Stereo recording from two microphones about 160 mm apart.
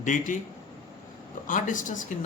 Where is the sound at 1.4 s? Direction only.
55° left (ahead or behind).